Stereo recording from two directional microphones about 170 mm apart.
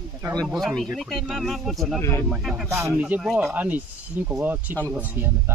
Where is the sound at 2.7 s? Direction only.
15° right (ahead or behind).